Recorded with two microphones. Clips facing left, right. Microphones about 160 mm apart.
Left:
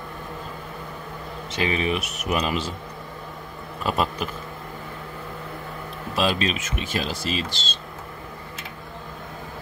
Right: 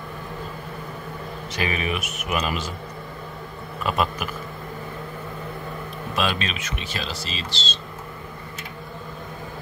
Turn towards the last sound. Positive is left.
turn(degrees=50)  # may be behind; listen again after turning